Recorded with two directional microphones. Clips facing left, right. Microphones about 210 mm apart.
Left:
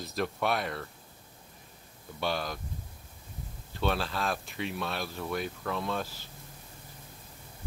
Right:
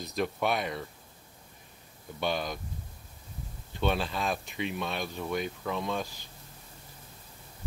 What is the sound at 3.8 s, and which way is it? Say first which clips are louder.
Speech: right 1 dB; centre (ahead or behind).